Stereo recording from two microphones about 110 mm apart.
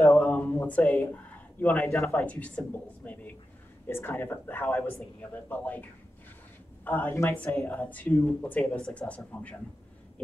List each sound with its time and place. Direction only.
0.0 s a sound: 15° left (ahead or behind)
1.9 s speech: 25° left (ahead or behind)
2.1 s speech: 15° left (ahead or behind)